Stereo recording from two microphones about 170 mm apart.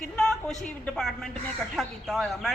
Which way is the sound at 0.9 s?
Centre (ahead or behind).